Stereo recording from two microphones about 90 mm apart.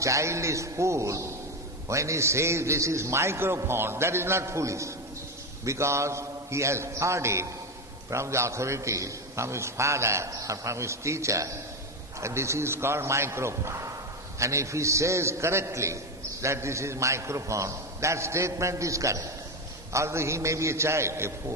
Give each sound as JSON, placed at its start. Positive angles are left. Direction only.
{"t": 0.0, "sound": "a man's voice", "side_deg": -35}